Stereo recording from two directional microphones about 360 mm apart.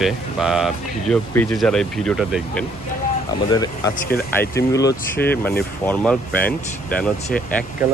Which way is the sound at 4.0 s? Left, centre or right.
Left.